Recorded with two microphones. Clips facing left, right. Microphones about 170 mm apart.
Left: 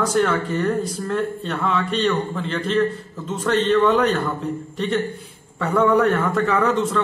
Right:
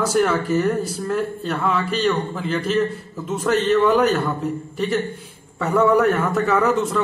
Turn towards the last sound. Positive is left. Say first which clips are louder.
# right 1 dB
turn(degrees=-5)  # may be behind; listen again after turning